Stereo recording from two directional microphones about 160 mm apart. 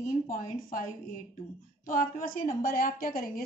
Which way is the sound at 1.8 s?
60° left (ahead or behind).